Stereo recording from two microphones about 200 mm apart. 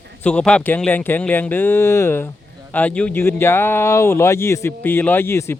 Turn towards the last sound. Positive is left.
turn(degrees=10)  # may be behind; listen again after turning